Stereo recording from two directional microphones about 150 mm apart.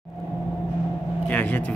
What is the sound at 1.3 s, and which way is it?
Vehicle, 10° left (ahead or behind).